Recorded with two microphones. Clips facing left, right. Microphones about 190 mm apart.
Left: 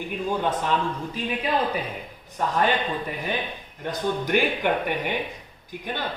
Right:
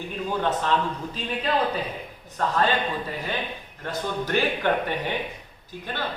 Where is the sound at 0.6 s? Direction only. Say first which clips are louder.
Even; 10° left (ahead or behind).